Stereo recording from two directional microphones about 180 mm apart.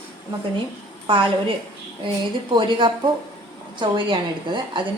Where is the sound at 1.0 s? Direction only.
25° right (ahead or behind).